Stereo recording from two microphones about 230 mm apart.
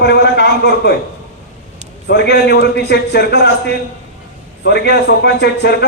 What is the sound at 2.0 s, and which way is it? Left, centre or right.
A man's voice, left.